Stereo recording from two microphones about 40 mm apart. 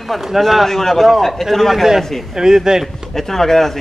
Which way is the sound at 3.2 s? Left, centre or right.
Centre.